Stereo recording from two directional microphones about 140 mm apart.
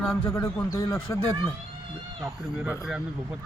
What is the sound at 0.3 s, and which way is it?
Speech, 20° left (ahead or behind).